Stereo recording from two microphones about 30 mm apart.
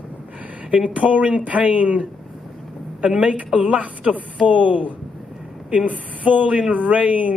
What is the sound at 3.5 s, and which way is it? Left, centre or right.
A man's voice, right.